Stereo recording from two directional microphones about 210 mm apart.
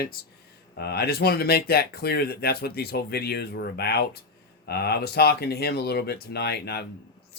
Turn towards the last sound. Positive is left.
turn(degrees=50)  # may be behind; listen again after turning